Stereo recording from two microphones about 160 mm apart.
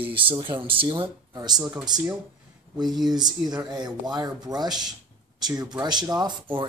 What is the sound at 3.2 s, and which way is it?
Speech, 25° right (ahead or behind).